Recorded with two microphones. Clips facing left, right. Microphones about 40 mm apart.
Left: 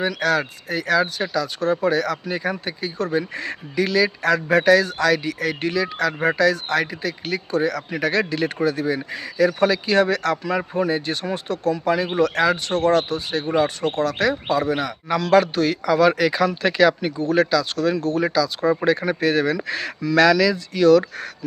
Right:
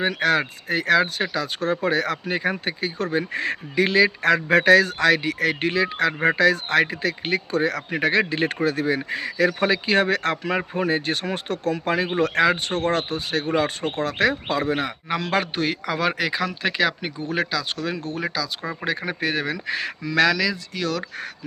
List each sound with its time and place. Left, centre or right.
0.0 s speech: right
8.1 s speech: right
13.1 s speech: right
14.0 s speech: right
15.1 s a man's voice: right; by 21.2 s centre